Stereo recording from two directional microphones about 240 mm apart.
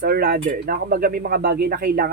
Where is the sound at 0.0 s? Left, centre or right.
Right.